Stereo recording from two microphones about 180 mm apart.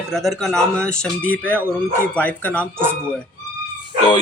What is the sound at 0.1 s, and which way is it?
Speech, centre (ahead or behind).